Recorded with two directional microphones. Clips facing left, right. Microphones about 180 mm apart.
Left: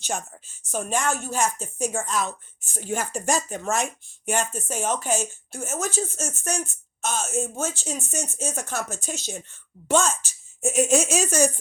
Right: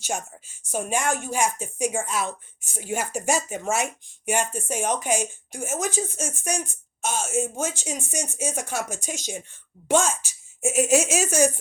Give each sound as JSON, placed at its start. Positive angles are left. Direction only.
{"t": 0.0, "sound": "speech", "side_deg": -10}